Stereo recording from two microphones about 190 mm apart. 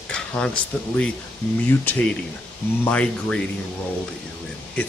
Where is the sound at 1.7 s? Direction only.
10° left (ahead or behind).